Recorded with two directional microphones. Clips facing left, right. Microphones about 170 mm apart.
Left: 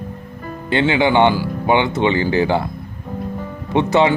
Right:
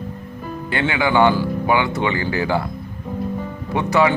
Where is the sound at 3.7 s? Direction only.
25° left (ahead or behind).